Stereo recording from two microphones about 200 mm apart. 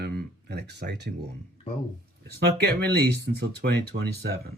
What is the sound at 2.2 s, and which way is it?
Speech, 55° right (ahead or behind).